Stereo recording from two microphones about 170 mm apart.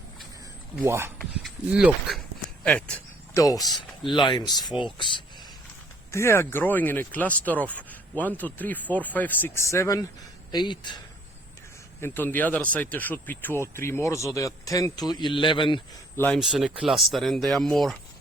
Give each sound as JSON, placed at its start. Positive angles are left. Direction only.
{"t": 0.8, "sound": "speech", "side_deg": -15}
{"t": 1.2, "sound": "speech", "side_deg": 0}
{"t": 3.3, "sound": "speech", "side_deg": 20}
{"t": 6.1, "sound": "speech", "side_deg": 15}
{"t": 11.9, "sound": "speech", "side_deg": 15}
{"t": 16.1, "sound": "speech", "side_deg": 10}
{"t": 16.4, "sound": "speech", "side_deg": -5}